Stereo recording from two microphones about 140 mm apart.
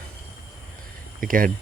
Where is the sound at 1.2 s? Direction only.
85° right.